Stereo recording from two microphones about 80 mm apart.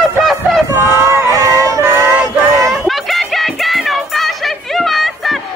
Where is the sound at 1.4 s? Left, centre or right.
Right.